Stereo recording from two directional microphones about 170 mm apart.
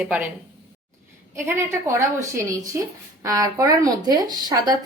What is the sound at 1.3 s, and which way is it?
A woman's voice, 15° right (ahead or behind).